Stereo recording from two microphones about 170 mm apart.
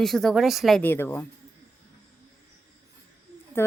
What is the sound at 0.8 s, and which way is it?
Speech, 10° left (ahead or behind).